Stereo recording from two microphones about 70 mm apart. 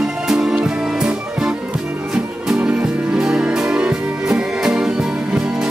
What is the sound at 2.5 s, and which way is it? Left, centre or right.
Music, centre.